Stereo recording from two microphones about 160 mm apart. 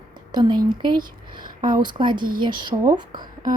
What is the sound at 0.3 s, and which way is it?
A woman's voice, 25° right (ahead or behind).